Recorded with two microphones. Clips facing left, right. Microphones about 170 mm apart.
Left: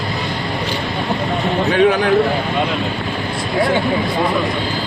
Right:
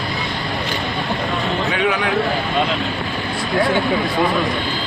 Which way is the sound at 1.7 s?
40° left (ahead or behind).